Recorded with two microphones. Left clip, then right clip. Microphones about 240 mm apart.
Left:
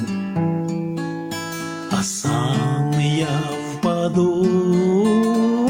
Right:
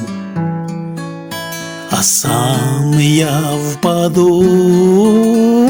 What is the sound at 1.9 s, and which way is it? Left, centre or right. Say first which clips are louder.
Music: right 10 dB; right.